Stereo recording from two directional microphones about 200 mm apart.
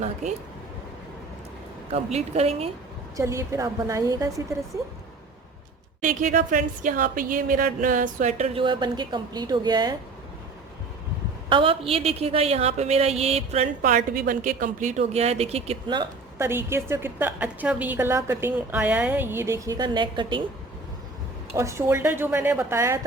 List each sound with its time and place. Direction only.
1.9 s a woman's voice: 35° right (ahead or behind)
3.2 s a woman's voice: 15° right (ahead or behind)
6.0 s a woman's voice: 40° right (ahead or behind); by 9.9 s 20° right (ahead or behind)
11.4 s a woman's voice: 25° right (ahead or behind)
16.4 s a woman's voice: 10° right (ahead or behind)
21.5 s a woman's voice: 15° right (ahead or behind)